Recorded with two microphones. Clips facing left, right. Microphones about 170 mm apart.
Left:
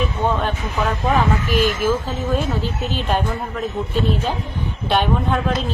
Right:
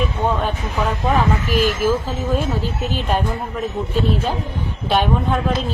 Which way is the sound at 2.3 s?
5° right (ahead or behind).